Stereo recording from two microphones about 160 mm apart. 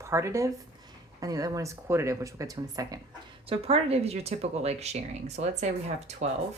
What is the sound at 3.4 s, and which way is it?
Speech, 35° right (ahead or behind).